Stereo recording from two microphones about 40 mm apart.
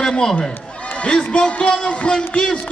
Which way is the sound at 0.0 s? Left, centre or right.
Centre.